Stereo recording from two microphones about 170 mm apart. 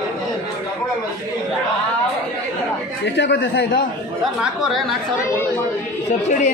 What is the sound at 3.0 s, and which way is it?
Speech, 90° left.